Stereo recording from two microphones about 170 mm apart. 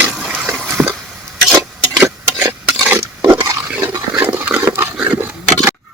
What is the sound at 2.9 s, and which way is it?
Pig, 15° right (ahead or behind).